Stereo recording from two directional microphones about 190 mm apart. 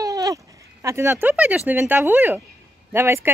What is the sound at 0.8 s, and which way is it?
Speech, 15° right (ahead or behind).